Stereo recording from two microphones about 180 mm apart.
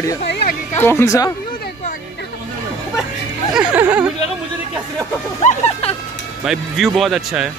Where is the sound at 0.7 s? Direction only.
15° left (ahead or behind).